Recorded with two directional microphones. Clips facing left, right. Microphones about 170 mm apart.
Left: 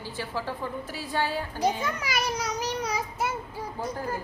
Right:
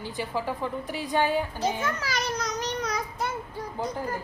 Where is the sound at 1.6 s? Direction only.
15° left (ahead or behind).